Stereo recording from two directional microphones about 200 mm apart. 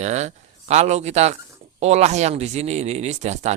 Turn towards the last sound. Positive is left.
turn(degrees=-35)  # may be behind; listen again after turning